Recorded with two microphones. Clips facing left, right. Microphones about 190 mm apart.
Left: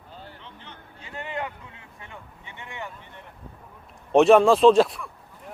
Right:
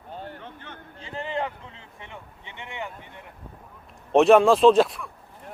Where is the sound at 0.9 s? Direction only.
30° right (ahead or behind).